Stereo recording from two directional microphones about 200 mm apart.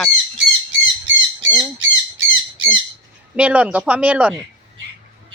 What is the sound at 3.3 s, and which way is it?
Speech, 5° right (ahead or behind).